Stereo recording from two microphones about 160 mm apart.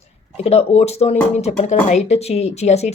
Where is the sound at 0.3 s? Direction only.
40° left (ahead or behind).